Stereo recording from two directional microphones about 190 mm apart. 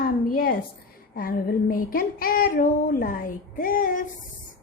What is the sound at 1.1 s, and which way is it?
A woman's voice, 50° left (ahead or behind).